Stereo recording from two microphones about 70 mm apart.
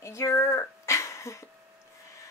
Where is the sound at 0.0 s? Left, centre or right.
Left.